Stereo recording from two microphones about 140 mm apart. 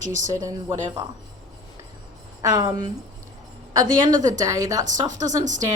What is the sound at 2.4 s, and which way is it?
Speech, 25° right (ahead or behind).